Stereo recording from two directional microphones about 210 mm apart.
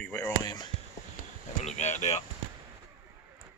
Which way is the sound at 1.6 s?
35° left (ahead or behind).